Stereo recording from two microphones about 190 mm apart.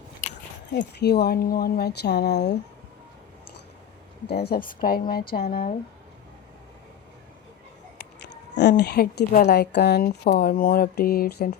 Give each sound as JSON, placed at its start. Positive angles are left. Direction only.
{"t": 0.7, "sound": "speech", "side_deg": 65}
{"t": 4.3, "sound": "a woman's voice", "side_deg": 55}
{"t": 7.9, "sound": "a sound", "side_deg": 60}
{"t": 8.8, "sound": "a woman's voice", "side_deg": 60}